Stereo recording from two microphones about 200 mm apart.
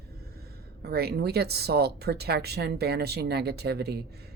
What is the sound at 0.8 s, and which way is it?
Speech, 50° right (ahead or behind).